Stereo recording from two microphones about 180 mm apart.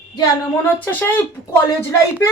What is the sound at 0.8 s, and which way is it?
Speech, 10° left (ahead or behind).